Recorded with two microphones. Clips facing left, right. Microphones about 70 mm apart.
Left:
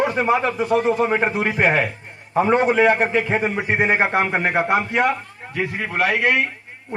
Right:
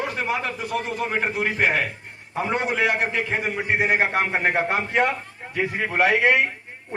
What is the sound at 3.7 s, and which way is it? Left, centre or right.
A man's voice, left.